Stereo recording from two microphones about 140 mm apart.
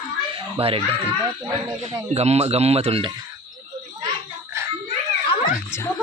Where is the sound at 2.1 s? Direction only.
50° right (ahead or behind).